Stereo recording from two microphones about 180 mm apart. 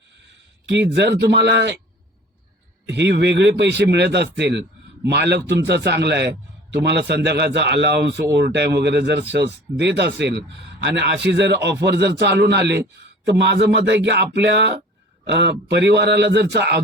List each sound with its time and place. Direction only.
1.2 s a man's voice: 75° right (ahead or behind)
2.9 s a man's voice: 75° right (ahead or behind)